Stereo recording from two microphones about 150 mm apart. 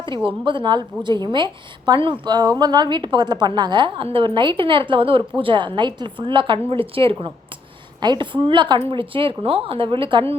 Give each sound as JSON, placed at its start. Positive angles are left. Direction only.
{"t": 0.3, "sound": "a woman's voice", "side_deg": -35}